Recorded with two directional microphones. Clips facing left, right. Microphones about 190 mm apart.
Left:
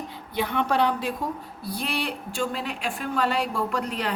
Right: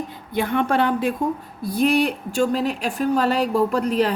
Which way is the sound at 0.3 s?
50° right (ahead or behind).